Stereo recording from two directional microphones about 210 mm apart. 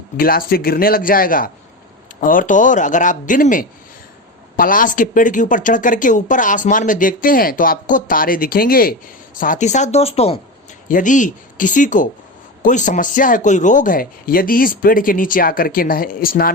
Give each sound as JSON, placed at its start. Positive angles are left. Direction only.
{"t": 0.2, "sound": "speech", "side_deg": 45}